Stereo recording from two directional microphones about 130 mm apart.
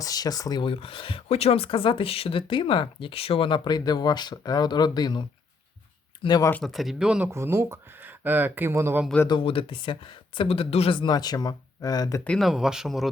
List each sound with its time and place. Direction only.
0.0 s speech: 30° left (ahead or behind)
6.2 s speech: 30° left (ahead or behind)
6.5 s speech: centre (ahead or behind)
7.3 s speech: 20° right (ahead or behind)
9.2 s speech: 40° left (ahead or behind)
12.2 s speech: 10° left (ahead or behind)
12.5 s speech: 5° right (ahead or behind)